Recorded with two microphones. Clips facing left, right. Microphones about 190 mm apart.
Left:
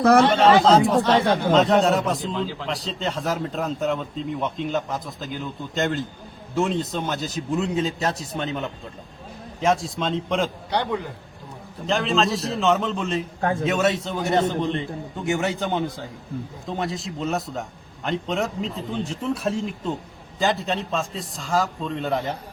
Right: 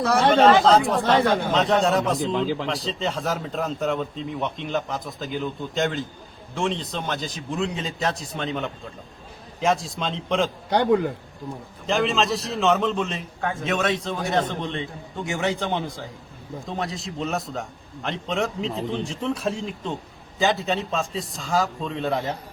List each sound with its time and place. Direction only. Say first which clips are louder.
0.0 s speech: left 6 dB; 55° left (ahead or behind)
0.4 s a man's voice: left 1 dB; centre (ahead or behind)
10.7 s a man's voice: right 10 dB; 45° right (ahead or behind)
11.9 s a man's voice: even; centre (ahead or behind)
13.1 s a man's voice: left 5 dB; 40° left (ahead or behind)
13.7 s a man's voice: even; 5° left (ahead or behind)